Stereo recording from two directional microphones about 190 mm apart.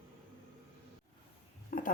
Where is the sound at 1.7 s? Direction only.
45° left (ahead or behind).